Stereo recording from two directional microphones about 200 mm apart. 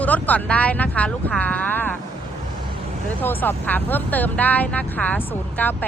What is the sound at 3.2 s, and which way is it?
Speech, 10° left (ahead or behind).